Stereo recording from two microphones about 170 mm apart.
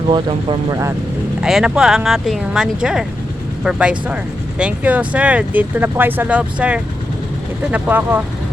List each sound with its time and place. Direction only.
0.1 s speech: 30° right (ahead or behind)
1.4 s speech: 5° right (ahead or behind)